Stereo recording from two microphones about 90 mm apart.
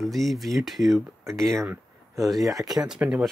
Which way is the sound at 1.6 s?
25° right (ahead or behind).